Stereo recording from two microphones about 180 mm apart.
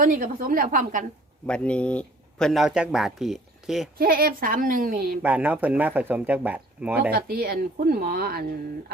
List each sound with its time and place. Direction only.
0.0 s a woman's voice: 50° right (ahead or behind)
1.5 s speech: 5° left (ahead or behind)
3.9 s a woman's voice: 55° right (ahead or behind)
5.2 s speech: 10° right (ahead or behind)
7.1 s speech: 60° right (ahead or behind)